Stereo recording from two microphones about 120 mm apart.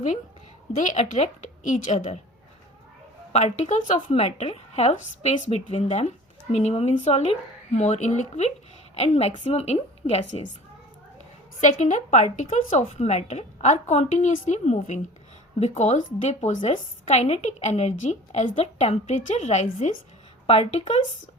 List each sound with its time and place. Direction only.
0.8 s a woman's voice: 80° left
3.3 s speech: 80° left
9.0 s a woman's voice: 60° left (ahead or behind)
11.6 s speech: 90° left
15.5 s speech: 70° left (ahead or behind)
20.5 s a woman's voice: 60° left (ahead or behind)